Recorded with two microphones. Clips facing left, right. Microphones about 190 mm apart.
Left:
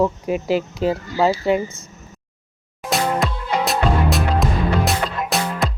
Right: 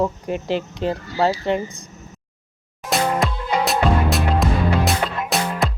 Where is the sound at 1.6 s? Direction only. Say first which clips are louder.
Even; 15° right (ahead or behind).